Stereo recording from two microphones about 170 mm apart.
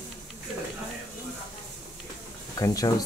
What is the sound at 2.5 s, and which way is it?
Speech, 20° left (ahead or behind).